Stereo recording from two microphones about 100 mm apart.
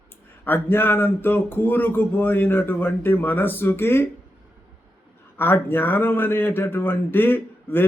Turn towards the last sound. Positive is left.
turn(degrees=20)  # may be behind; listen again after turning